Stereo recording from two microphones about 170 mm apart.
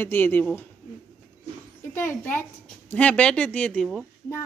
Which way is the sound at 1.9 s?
10° left (ahead or behind).